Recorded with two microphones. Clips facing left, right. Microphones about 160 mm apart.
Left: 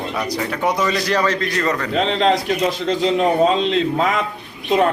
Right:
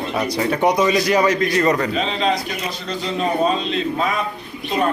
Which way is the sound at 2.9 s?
85° left.